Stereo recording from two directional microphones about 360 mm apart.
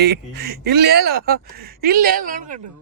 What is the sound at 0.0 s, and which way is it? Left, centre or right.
Speech, right.